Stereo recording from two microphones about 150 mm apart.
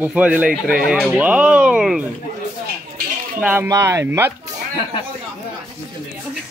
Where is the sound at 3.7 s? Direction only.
20° right (ahead or behind).